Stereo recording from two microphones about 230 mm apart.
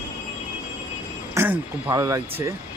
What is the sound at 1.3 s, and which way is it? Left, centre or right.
Speech, centre.